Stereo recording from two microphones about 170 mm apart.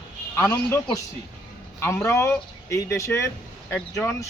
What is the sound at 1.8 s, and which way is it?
Speech, 15° left (ahead or behind).